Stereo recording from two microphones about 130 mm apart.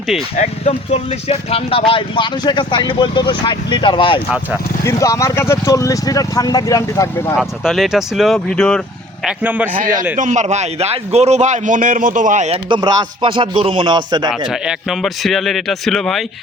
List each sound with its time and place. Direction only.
0.3 s speech: 55° left (ahead or behind)
4.8 s speech: 25° left (ahead or behind)
7.3 s a man's voice: centre (ahead or behind)
9.2 s speech: 10° right (ahead or behind)
9.7 s a man's voice: 90° right
10.2 s a man's voice: 65° right (ahead or behind)
12.6 s a man's voice: 35° right (ahead or behind)
14.3 s a man's voice: 5° right (ahead or behind)